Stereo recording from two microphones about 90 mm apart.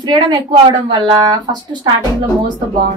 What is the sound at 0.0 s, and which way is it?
Speech, 50° right (ahead or behind).